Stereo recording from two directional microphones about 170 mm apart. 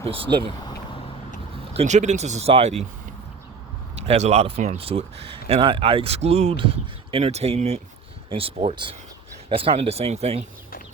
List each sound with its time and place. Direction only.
0.0 s speech: 30° right (ahead or behind)
1.7 s speech: 40° right (ahead or behind)
4.0 s speech: 40° right (ahead or behind)